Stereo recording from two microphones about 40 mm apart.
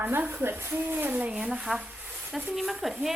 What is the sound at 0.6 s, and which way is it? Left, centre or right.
Speech, right.